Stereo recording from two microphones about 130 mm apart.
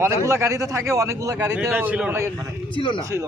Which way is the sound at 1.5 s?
15° right (ahead or behind).